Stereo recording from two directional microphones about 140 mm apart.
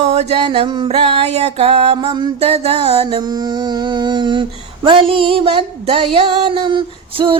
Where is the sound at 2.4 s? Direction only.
45° right (ahead or behind).